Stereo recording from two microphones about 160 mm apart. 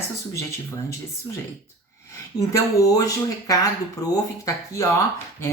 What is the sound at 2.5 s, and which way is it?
Speech, 20° left (ahead or behind).